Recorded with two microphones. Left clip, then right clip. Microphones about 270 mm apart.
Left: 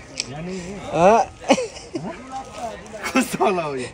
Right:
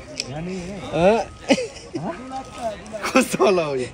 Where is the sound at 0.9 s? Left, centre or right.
Centre.